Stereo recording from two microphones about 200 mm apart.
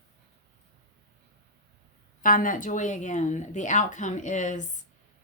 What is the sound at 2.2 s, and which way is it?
Speech, 45° left (ahead or behind).